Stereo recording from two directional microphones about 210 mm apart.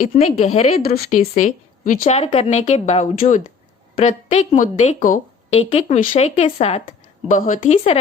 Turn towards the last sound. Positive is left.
turn(degrees=30)  # may be behind; listen again after turning